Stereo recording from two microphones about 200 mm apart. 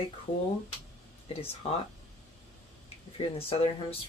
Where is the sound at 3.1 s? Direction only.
25° left (ahead or behind).